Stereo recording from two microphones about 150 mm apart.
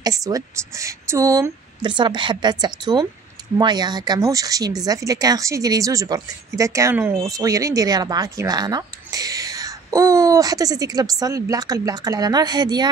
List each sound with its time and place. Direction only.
0.0 s speech: 25° right (ahead or behind)